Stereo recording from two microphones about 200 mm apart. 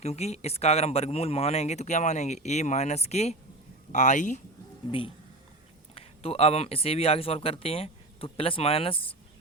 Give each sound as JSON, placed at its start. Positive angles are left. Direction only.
{"t": 0.0, "sound": "speech", "side_deg": 30}
{"t": 4.9, "sound": "speech", "side_deg": 25}